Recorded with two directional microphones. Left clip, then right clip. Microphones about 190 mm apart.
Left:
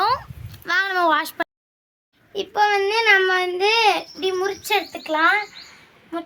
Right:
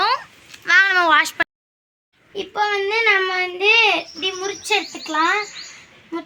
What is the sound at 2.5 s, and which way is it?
Speech, centre (ahead or behind).